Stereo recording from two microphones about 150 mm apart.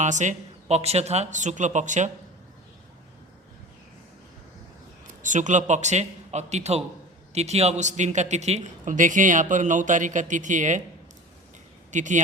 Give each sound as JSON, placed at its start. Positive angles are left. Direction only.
{"t": 0.0, "sound": "speech", "side_deg": -55}
{"t": 5.2, "sound": "speech", "side_deg": -55}
{"t": 11.9, "sound": "speech", "side_deg": -55}